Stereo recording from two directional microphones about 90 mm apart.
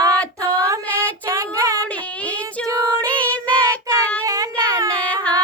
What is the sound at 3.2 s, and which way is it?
Child singing, 15° left (ahead or behind).